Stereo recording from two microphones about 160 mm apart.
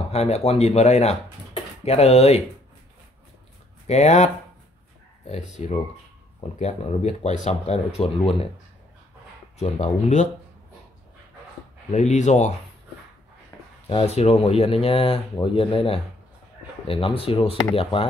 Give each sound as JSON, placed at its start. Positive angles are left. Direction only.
{"t": 0.1, "sound": "speech", "side_deg": 40}
{"t": 3.8, "sound": "speech", "side_deg": 45}
{"t": 9.6, "sound": "speech", "side_deg": 45}
{"t": 11.9, "sound": "speech", "side_deg": 45}
{"t": 13.8, "sound": "speech", "side_deg": 40}